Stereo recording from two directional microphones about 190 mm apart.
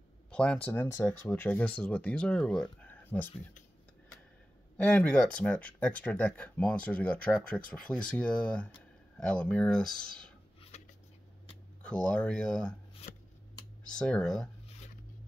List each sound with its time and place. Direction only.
0.3 s speech: 5° left (ahead or behind)
4.8 s speech: 5° left (ahead or behind)
10.7 s a sound: 35° left (ahead or behind)
11.8 s speech: 5° left (ahead or behind)
13.8 s speech: 5° left (ahead or behind)